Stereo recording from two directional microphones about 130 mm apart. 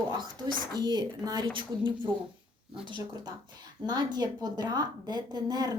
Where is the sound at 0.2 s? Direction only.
35° right (ahead or behind).